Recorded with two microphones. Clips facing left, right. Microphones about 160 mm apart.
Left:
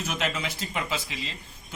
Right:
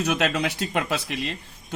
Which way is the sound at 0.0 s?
65° right (ahead or behind).